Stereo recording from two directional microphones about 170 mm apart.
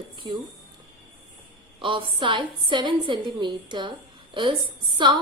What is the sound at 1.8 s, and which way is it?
A woman's voice, 30° right (ahead or behind).